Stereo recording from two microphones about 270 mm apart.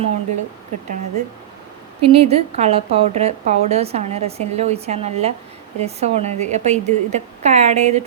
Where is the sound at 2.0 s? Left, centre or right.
Right.